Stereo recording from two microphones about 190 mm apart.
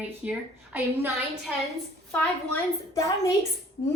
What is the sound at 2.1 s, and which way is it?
A woman's voice, 15° left (ahead or behind).